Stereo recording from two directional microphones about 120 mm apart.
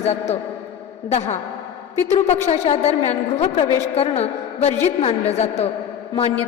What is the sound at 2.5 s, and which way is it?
A woman's voice, 65° left (ahead or behind).